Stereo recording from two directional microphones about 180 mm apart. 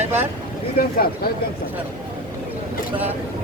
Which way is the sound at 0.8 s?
60° left (ahead or behind).